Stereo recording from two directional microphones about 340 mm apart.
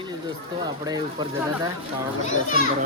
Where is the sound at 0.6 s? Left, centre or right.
Centre.